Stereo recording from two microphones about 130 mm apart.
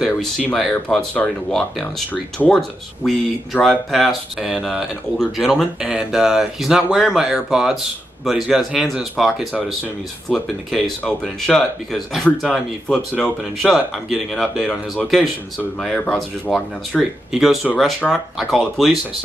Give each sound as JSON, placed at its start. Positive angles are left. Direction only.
{"t": 0.0, "sound": "speech", "side_deg": 5}
{"t": 15.8, "sound": "speech", "side_deg": 0}